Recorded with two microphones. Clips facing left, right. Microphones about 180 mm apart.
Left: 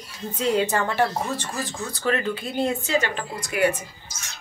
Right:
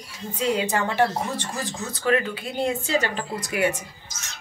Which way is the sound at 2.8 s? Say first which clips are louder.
Even; 35° right (ahead or behind).